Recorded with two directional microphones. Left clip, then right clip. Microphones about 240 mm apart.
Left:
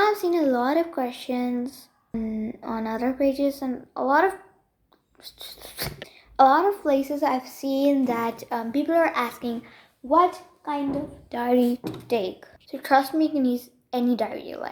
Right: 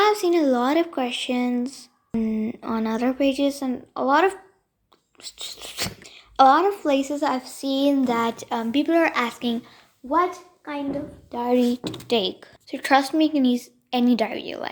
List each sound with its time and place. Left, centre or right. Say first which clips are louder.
0.0 s speech: right 2 dB; right
5.2 s a sound: right 5 dB; right
6.1 s a woman's voice: right 2 dB; right
7.6 s a sound: right 1 dB; centre
8.4 s a woman's voice: right 2 dB; right
10.0 s a child's voice: left 2 dB; centre
11.3 s speech: right 1 dB; centre
11.9 s a woman's voice: right 3 dB; right